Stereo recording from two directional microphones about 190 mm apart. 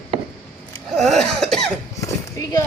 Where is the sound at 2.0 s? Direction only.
15° left (ahead or behind).